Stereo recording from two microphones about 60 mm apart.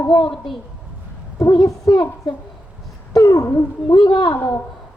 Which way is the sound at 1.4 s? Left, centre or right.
Left.